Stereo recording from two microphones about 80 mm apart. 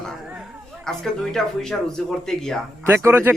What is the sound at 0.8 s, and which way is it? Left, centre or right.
Speech, centre.